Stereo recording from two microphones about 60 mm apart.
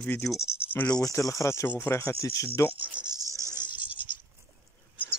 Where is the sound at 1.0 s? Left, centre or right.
Left.